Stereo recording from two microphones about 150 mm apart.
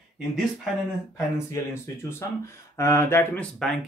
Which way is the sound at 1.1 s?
15° left (ahead or behind).